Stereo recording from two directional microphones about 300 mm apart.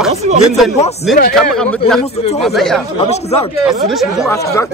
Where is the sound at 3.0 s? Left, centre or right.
Left.